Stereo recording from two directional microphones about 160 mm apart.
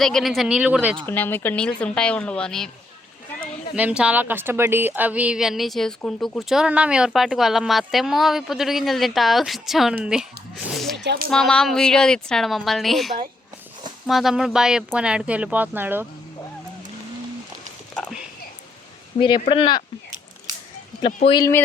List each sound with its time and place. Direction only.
0.0 s speech: centre (ahead or behind)
1.0 s speech: 10° left (ahead or behind)
3.8 s speech: 10° right (ahead or behind)
10.9 s speech: 90° right
11.3 s speech: 5° left (ahead or behind); by 16.0 s 15° right (ahead or behind)
19.2 s speech: 35° left (ahead or behind)
21.3 s speech: 20° left (ahead or behind)